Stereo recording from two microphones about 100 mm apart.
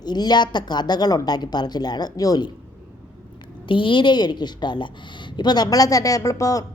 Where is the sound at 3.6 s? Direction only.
55° left (ahead or behind); by 6.6 s 35° left (ahead or behind).